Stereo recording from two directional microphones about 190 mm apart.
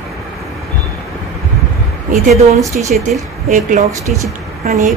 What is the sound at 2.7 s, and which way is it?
A woman's voice, 45° right (ahead or behind).